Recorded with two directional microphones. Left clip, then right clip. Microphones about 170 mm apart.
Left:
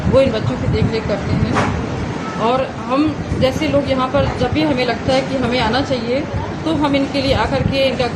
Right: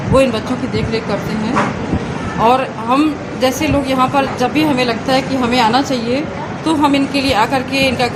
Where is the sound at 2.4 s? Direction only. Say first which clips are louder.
Right 5 dB; 45° right (ahead or behind).